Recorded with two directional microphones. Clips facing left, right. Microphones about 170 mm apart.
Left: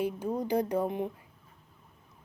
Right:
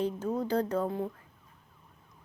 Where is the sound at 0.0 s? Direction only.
10° left (ahead or behind).